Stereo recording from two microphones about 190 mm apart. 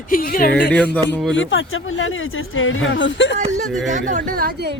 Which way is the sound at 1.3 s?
85° left.